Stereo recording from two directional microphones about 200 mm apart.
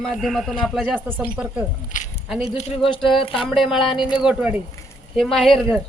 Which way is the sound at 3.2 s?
25° left (ahead or behind).